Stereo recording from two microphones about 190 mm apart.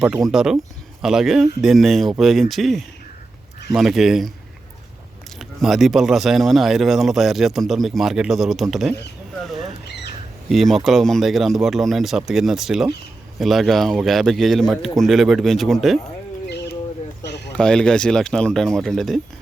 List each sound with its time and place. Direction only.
0.0 s speech: 5° right (ahead or behind)
5.4 s speech: centre (ahead or behind)
9.4 s rodents: centre (ahead or behind)
9.8 s a sound: 60° left (ahead or behind)
10.5 s speech: centre (ahead or behind)
17.6 s speech: 5° left (ahead or behind)